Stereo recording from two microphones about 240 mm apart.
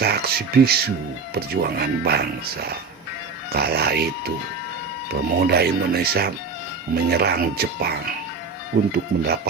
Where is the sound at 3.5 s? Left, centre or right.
Right.